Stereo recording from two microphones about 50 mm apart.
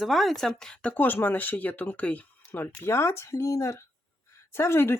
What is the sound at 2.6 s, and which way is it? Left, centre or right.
Speech, left.